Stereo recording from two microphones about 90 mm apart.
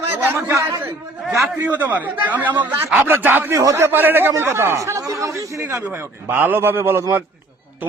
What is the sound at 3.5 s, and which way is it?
Speech, 40° right (ahead or behind).